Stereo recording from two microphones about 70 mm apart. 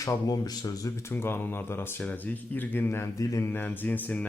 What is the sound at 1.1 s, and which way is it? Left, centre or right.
Speech, left.